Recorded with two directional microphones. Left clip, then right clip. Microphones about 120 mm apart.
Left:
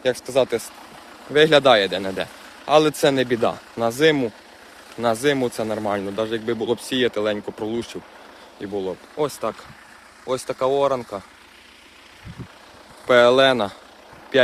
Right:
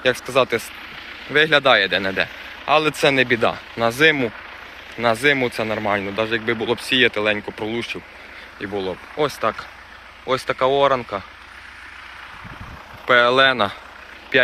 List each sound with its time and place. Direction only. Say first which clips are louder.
0.0 s speech: right 2 dB; 15° left (ahead or behind)
2.6 s speech: even; 40° left (ahead or behind); by 4.3 s 20° left (ahead or behind)
4.9 s speech: right 3 dB; 40° left (ahead or behind)
6.7 s speech: right 5 dB; 40° left (ahead or behind)
8.6 s speech: right 1 dB; 20° left (ahead or behind)
13.1 s speech: even; 15° left (ahead or behind)
14.3 s vehicle: even; 35° left (ahead or behind)